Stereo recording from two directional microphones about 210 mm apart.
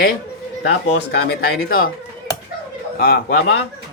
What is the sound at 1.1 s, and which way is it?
Speech, 50° left (ahead or behind).